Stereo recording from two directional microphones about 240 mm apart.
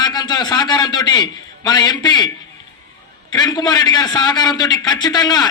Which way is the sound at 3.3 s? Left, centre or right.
Centre.